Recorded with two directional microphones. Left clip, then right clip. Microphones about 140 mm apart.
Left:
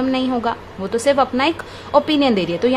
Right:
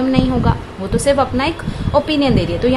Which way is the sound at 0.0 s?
30° left (ahead or behind).